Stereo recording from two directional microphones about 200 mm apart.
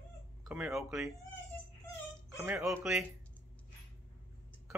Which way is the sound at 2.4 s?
5° right (ahead or behind).